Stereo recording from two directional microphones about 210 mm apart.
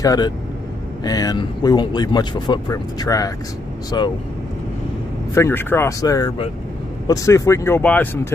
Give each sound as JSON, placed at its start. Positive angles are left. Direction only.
{"t": 0.0, "sound": "speech", "side_deg": 15}
{"t": 5.3, "sound": "speech", "side_deg": 10}